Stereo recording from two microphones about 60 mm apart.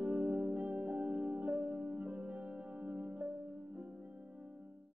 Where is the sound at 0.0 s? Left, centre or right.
Right.